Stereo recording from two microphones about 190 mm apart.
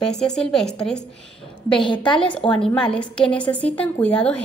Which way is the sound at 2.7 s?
5° left (ahead or behind).